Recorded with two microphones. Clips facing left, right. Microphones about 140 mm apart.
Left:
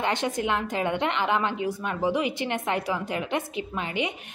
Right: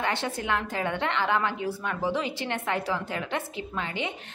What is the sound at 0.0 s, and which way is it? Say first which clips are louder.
A woman's voice: left 3 dB; 20° left (ahead or behind).